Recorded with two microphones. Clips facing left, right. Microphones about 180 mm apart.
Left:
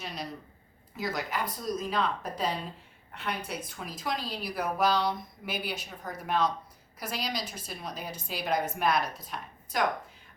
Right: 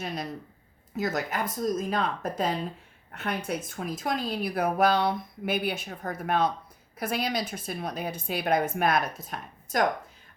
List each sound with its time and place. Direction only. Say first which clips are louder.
0.0 s speech: right 5 dB; 50° right (ahead or behind)